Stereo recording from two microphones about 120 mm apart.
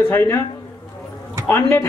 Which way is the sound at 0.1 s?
20° left (ahead or behind).